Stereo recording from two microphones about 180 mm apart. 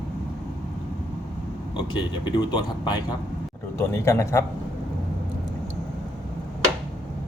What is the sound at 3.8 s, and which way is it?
Speech, 15° left (ahead or behind).